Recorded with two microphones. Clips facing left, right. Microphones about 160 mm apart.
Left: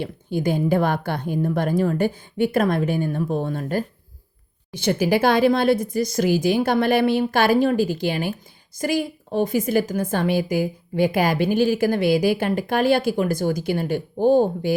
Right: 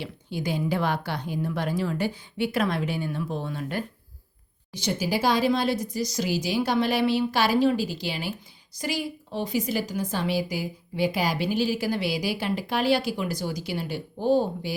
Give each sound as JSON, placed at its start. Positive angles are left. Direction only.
{"t": 0.0, "sound": "speech", "side_deg": 50}
{"t": 4.7, "sound": "speech", "side_deg": 55}